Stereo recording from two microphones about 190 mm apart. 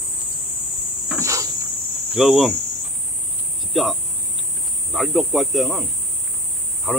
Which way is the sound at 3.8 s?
Centre (ahead or behind).